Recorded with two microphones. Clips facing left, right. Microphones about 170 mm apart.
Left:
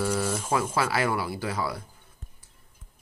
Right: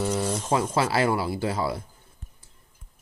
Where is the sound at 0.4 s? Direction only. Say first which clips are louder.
Right 2 dB; 25° right (ahead or behind).